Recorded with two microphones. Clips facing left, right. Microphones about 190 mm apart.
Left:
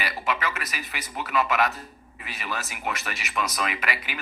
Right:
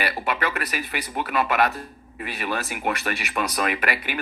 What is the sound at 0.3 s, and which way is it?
Speech, 60° right (ahead or behind).